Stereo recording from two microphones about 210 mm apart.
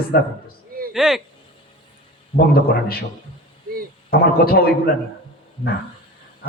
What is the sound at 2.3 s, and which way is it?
Speech, 45° left (ahead or behind).